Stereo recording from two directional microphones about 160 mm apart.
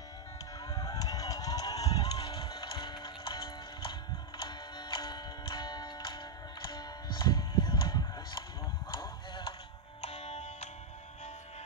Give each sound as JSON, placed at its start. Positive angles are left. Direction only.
{"t": 0.6, "sound": "a sound", "side_deg": 25}
{"t": 2.1, "sound": "music", "side_deg": 35}
{"t": 8.9, "sound": "chop", "side_deg": 30}
{"t": 10.0, "sound": "music", "side_deg": 40}